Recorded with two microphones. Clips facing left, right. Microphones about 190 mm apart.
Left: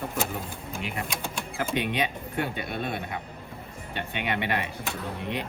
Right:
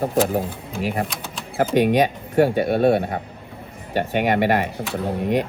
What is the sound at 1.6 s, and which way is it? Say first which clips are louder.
Speech: right 11 dB; 45° right (ahead or behind).